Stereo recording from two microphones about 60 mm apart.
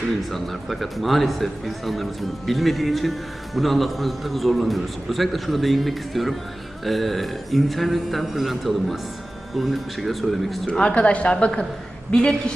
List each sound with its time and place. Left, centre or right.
0.2 s a man's voice: centre
10.7 s a woman's voice: centre